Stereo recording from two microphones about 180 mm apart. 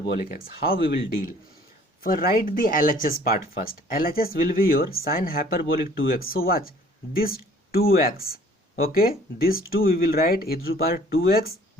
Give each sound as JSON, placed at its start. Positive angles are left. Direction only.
{"t": 0.0, "sound": "speech", "side_deg": 55}